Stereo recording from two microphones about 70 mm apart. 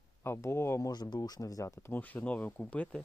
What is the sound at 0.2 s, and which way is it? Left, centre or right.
Speech, left.